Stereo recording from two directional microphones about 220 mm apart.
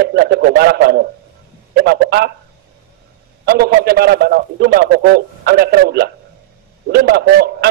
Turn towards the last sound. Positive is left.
turn(degrees=-45)  # may be behind; listen again after turning